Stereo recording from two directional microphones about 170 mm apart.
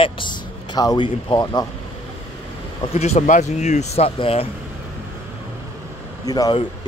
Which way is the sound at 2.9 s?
40° left (ahead or behind).